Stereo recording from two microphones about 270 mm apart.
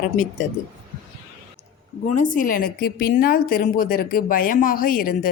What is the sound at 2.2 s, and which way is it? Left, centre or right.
A woman's voice, left.